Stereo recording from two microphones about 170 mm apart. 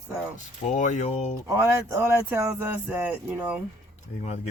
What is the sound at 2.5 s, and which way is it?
Speech, 15° right (ahead or behind).